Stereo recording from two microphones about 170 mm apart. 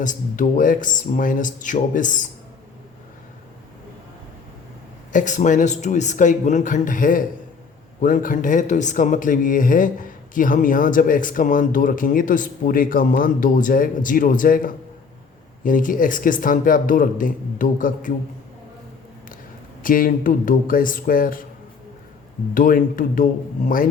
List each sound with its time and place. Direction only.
0.0 s speech: 50° left (ahead or behind)
5.1 s speech: 45° left (ahead or behind)
19.8 s speech: 55° left (ahead or behind)
22.5 s speech: 55° left (ahead or behind)